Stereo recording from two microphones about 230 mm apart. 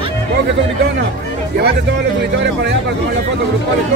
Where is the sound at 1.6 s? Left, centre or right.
Right.